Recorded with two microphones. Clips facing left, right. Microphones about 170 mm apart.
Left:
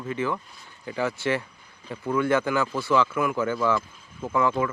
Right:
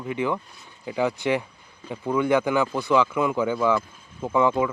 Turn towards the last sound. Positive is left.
turn(degrees=-15)  # may be behind; listen again after turning